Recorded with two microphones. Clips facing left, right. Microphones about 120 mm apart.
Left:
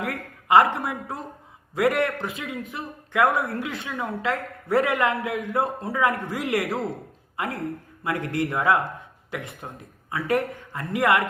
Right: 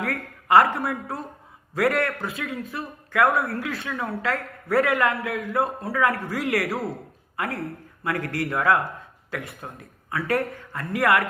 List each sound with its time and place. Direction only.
0.0 s a man's voice: 15° left (ahead or behind)